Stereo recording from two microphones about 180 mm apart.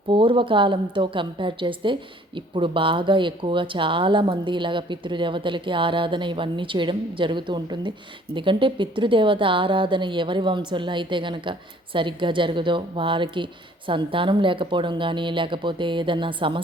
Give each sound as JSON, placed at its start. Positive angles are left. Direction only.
{"t": 0.1, "sound": "a woman's voice", "side_deg": -25}